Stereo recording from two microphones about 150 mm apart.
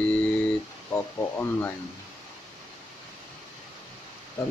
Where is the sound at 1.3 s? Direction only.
15° left (ahead or behind).